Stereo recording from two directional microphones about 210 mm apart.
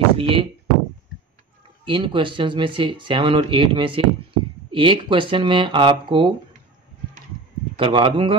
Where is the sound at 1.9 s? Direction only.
25° right (ahead or behind).